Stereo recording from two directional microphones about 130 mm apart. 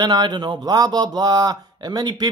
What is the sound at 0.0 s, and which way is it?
Speech, 35° right (ahead or behind).